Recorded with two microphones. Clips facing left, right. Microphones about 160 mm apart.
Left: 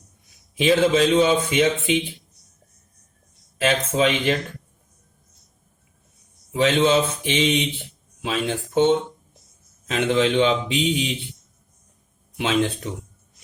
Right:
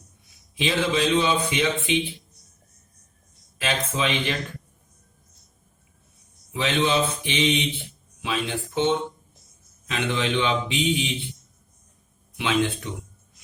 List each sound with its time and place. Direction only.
0.6 s speech: 45° left (ahead or behind)
3.6 s speech: 45° left (ahead or behind)
6.5 s speech: 45° left (ahead or behind)
12.4 s speech: 40° left (ahead or behind)